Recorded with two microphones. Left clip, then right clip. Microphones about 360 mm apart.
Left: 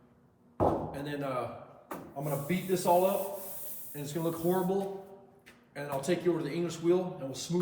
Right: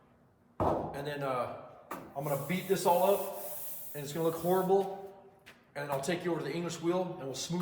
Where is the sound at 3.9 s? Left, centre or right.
Centre.